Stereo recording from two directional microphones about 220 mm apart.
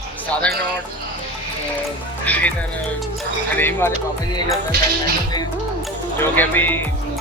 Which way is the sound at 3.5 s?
10° left (ahead or behind).